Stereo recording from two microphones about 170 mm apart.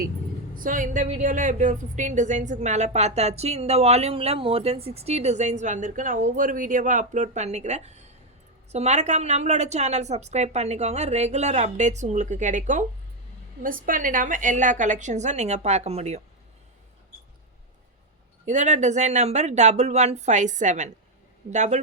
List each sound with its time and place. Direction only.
0.5 s a woman's voice: 50° right (ahead or behind)
18.4 s a woman's voice: 45° right (ahead or behind)